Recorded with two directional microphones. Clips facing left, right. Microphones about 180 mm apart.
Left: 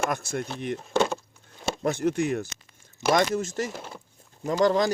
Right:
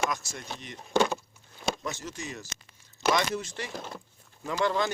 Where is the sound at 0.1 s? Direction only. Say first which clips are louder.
Left 6 dB; 55° left (ahead or behind).